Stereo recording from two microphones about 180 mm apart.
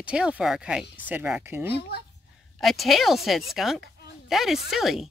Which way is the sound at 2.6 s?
Centre (ahead or behind).